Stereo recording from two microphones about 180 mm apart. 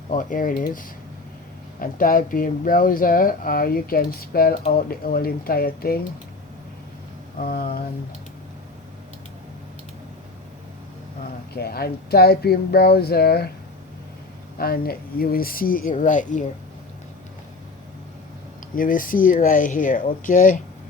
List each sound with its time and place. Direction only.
0.1 s speech: 45° left (ahead or behind)
7.4 s speech: 50° left (ahead or behind)
11.5 s speech: 60° left (ahead or behind)
14.6 s speech: 55° left (ahead or behind)
18.8 s speech: 50° left (ahead or behind)